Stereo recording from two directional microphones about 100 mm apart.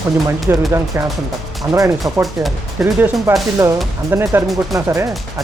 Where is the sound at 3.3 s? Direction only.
20° right (ahead or behind).